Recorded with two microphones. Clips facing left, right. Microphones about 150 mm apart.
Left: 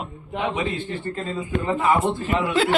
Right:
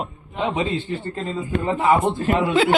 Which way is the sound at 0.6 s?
20° right (ahead or behind).